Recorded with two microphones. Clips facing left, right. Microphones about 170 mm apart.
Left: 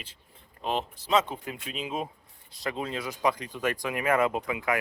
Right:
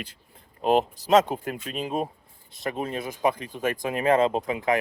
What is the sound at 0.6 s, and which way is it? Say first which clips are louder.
Speech: right 9 dB; 45° right (ahead or behind).